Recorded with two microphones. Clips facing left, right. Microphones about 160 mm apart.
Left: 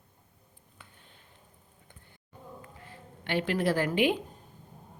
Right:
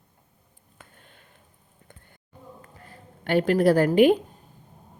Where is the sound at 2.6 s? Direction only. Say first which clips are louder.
Right 1 dB; 45° right (ahead or behind).